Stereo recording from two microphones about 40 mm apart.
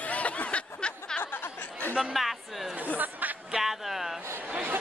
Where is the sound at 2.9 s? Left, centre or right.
Right.